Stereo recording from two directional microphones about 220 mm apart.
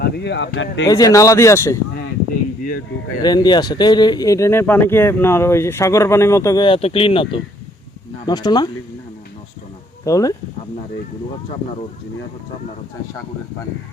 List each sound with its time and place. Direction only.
0.0 s speech: 50° left (ahead or behind)
0.9 s speech: 15° left (ahead or behind)
3.2 s speech: 20° left (ahead or behind)
10.0 s speech: 15° left (ahead or behind)